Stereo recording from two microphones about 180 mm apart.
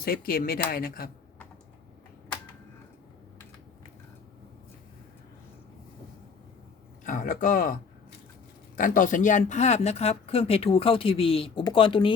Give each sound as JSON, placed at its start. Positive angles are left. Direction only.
{"t": 0.0, "sound": "speech", "side_deg": 55}
{"t": 7.0, "sound": "speech", "side_deg": 45}